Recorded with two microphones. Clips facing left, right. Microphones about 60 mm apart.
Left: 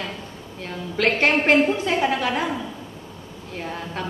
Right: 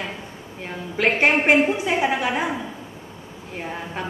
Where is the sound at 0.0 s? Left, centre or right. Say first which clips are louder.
Even; centre.